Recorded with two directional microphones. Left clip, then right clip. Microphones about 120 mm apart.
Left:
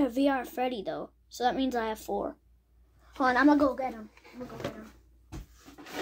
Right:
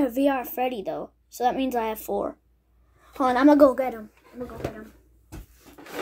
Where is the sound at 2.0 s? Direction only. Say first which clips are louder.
Right 5 dB; 25° right (ahead or behind).